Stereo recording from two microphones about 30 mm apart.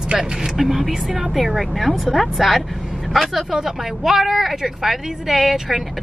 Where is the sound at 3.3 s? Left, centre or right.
Centre.